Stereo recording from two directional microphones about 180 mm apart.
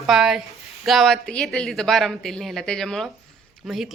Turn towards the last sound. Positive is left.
turn(degrees=-5)  # may be behind; listen again after turning